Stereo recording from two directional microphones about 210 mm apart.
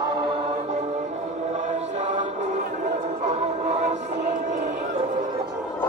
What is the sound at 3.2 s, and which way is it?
Music, 30° right (ahead or behind).